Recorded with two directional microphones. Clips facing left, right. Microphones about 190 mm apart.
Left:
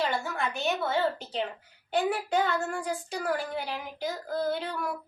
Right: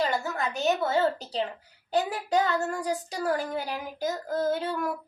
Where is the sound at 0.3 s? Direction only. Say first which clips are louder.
Right 3 dB; 40° right (ahead or behind).